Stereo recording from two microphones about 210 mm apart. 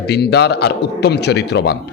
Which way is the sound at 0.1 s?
50° left (ahead or behind).